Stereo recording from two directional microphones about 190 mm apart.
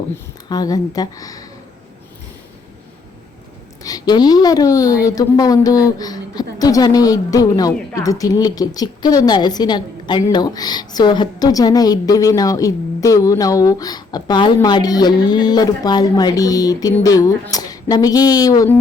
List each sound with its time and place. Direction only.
0.4 s speech: 20° left (ahead or behind)
3.8 s speech: 20° left (ahead or behind)